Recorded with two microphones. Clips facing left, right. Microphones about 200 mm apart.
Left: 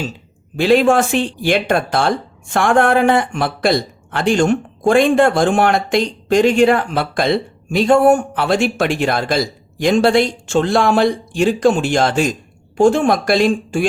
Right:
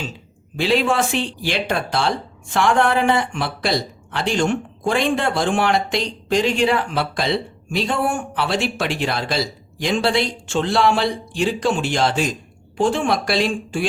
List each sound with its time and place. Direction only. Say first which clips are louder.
0.5 s speech: left 6 dB; 50° left (ahead or behind)